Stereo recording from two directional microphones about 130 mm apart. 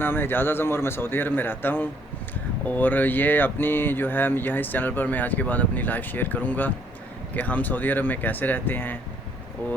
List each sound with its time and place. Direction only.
0.0 s speech: 15° left (ahead or behind)